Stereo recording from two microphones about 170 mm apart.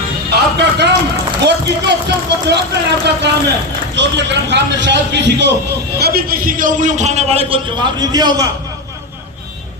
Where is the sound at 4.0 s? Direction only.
90° right.